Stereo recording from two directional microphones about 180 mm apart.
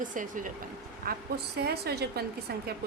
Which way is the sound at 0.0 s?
45° right (ahead or behind).